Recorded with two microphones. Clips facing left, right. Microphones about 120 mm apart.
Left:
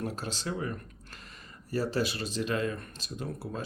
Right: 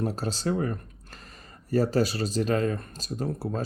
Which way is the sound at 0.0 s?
40° right (ahead or behind).